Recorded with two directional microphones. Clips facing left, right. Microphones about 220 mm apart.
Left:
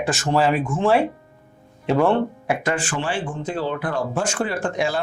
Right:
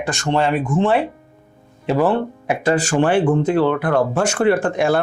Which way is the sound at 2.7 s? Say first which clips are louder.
Right 9 dB; 40° right (ahead or behind).